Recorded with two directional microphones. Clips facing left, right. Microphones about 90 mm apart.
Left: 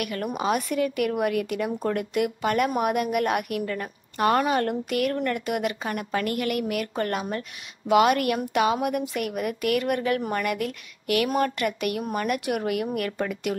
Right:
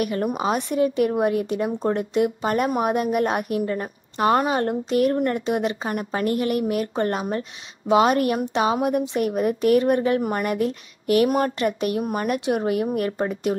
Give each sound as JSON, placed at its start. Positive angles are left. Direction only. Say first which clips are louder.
{"t": 0.0, "sound": "a woman's voice", "louder": "right 4 dB", "side_deg": -30}